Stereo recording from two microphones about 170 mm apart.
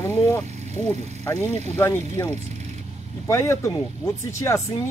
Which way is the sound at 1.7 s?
15° left (ahead or behind).